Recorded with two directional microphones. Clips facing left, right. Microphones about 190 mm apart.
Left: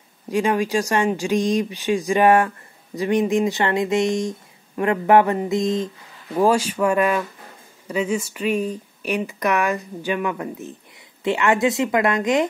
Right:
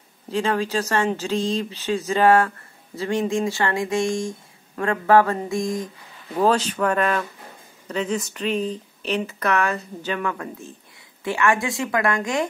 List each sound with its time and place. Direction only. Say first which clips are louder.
0.3 s speech: left 3 dB; 15° left (ahead or behind)
6.3 s speech: left 2 dB; 10° left (ahead or behind)